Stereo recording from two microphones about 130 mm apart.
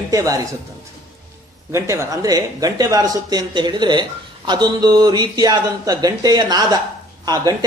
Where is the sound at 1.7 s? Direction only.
20° right (ahead or behind).